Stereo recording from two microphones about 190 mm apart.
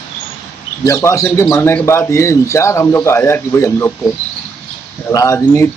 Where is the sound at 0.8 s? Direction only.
15° left (ahead or behind).